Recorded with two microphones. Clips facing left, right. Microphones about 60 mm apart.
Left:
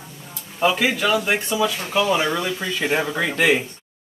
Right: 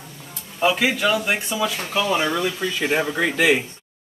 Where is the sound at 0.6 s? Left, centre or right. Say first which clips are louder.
Even; centre.